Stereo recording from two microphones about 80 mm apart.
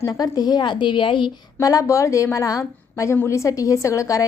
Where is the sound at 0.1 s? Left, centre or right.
Left.